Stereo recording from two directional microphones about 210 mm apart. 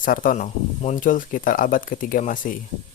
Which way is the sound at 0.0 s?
40° left (ahead or behind).